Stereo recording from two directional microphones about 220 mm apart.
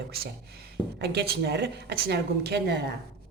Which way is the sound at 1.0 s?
50° right (ahead or behind).